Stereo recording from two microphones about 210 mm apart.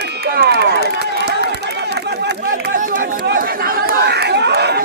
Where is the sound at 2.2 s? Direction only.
45° right (ahead or behind).